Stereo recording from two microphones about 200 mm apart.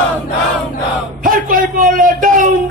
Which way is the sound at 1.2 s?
45° right (ahead or behind).